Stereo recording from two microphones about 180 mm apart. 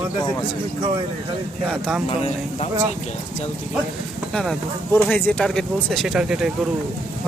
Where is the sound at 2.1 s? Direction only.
35° left (ahead or behind).